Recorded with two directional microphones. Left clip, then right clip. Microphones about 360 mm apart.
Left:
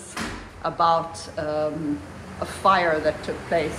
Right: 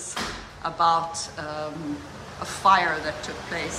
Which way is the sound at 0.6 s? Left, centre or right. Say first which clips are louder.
Left 1 dB; centre.